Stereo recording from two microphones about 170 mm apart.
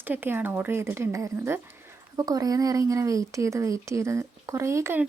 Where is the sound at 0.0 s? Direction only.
10° right (ahead or behind).